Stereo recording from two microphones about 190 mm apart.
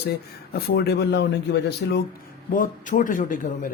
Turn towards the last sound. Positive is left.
turn(degrees=45)  # may be behind; listen again after turning